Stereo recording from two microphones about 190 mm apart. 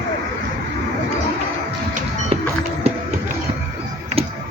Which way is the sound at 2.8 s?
30° right (ahead or behind).